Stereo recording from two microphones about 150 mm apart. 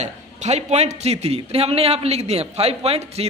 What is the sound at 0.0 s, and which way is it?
A man's voice, 50° right (ahead or behind).